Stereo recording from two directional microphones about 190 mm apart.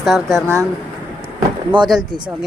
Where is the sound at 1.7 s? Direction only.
25° right (ahead or behind).